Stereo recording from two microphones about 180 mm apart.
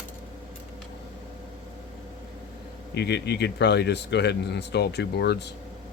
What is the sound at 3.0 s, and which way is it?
Speech, 65° left (ahead or behind).